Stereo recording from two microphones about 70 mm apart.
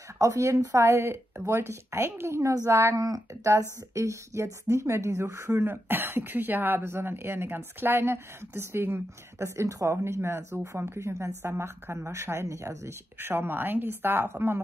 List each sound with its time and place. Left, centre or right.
0.2 s a woman's voice: right
13.2 s speech: right